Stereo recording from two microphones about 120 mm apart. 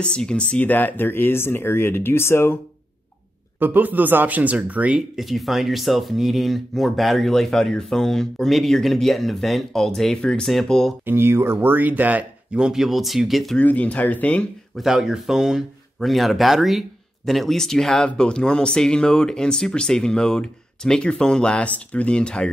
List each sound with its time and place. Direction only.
0.0 s speech: 10° left (ahead or behind)
3.5 s speech: 15° right (ahead or behind); by 11.0 s centre (ahead or behind)
11.1 s speech: 20° right (ahead or behind); by 13.6 s centre (ahead or behind)
13.6 s speech: 10° left (ahead or behind)
14.8 s speech: 5° right (ahead or behind)